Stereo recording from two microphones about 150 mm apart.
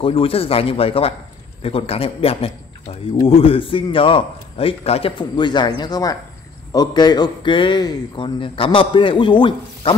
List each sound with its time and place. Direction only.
0.0 s a man's voice: 40° left (ahead or behind)
5.3 s a man's voice: 30° left (ahead or behind)